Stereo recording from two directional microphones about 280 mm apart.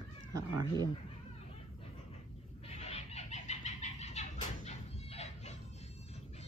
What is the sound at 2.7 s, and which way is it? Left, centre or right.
Bird, left.